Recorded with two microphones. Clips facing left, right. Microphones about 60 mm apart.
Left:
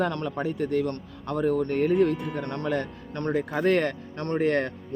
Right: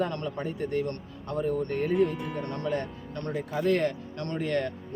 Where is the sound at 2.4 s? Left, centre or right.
Left.